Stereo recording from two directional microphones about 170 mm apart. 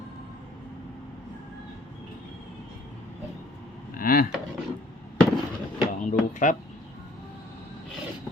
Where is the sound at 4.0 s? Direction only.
55° left (ahead or behind).